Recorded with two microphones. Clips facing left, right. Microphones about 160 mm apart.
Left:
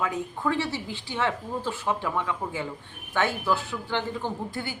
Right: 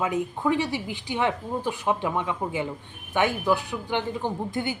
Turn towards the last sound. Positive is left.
turn(degrees=-20)  # may be behind; listen again after turning